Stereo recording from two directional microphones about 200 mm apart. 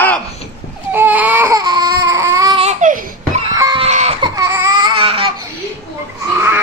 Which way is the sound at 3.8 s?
30° right (ahead or behind).